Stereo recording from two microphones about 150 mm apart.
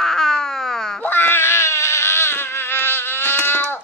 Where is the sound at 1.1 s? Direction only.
15° left (ahead or behind).